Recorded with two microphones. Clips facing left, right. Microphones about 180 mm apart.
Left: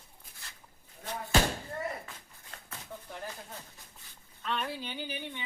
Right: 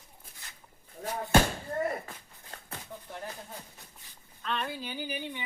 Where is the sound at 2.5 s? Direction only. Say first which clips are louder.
Right 3 dB; 35° right (ahead or behind).